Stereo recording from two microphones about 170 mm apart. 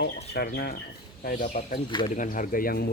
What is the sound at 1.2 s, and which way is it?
Speech, 50° left (ahead or behind).